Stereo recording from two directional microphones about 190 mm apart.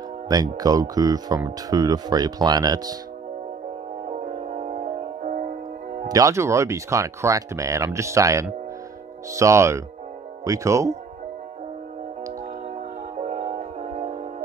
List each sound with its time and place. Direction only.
0.3 s speech: 20° right (ahead or behind)
4.1 s music: 40° right (ahead or behind)
6.0 s speech: 15° right (ahead or behind)
13.2 s music: 40° right (ahead or behind)